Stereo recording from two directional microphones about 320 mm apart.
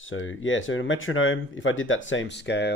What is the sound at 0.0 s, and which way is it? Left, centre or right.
Speech, left.